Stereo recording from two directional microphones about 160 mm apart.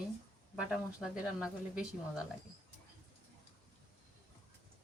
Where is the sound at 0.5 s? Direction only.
5° right (ahead or behind).